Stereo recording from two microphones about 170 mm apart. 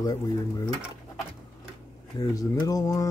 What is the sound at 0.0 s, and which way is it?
Speech, 20° left (ahead or behind).